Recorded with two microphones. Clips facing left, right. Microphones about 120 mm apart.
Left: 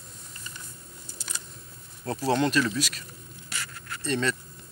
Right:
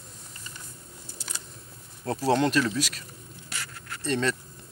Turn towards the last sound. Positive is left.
turn(degrees=-40)  # may be behind; listen again after turning